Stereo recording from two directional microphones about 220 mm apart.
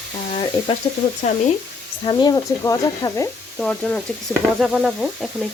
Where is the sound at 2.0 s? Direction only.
20° left (ahead or behind).